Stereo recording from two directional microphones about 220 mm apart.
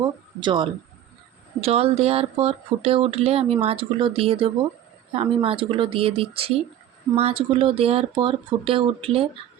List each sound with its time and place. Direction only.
0.0 s speech: 20° right (ahead or behind)